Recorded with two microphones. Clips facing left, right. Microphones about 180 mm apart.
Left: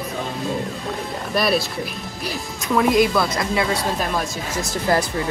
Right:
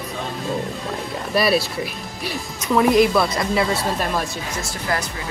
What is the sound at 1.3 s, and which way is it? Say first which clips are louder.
Speech: right 2 dB; centre (ahead or behind).